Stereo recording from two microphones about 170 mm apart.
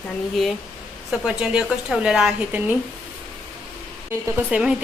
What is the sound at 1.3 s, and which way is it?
A woman's voice, 5° right (ahead or behind).